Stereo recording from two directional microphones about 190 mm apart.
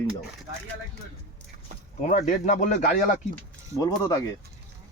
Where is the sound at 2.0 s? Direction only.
40° left (ahead or behind).